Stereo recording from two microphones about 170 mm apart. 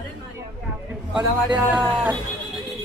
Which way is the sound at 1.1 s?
10° right (ahead or behind).